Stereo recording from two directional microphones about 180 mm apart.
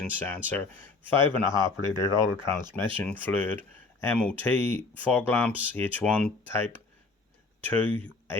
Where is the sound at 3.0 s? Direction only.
10° left (ahead or behind).